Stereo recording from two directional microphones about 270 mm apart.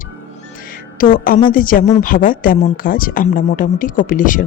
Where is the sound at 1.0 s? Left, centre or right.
Left.